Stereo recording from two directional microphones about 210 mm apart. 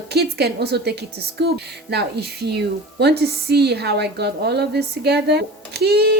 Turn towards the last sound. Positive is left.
turn(degrees=-50)  # may be behind; listen again after turning